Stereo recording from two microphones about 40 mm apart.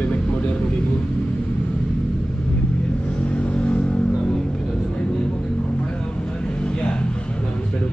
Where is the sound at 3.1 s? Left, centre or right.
Left.